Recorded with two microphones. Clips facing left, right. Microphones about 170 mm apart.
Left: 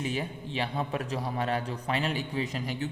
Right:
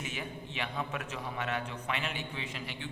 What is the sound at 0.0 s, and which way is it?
A man's voice, 35° left (ahead or behind).